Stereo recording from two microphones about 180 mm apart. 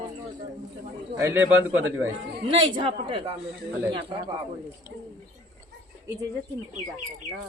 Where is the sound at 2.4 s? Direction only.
30° right (ahead or behind).